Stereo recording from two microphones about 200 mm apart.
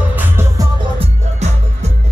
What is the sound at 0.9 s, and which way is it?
Music, 35° right (ahead or behind).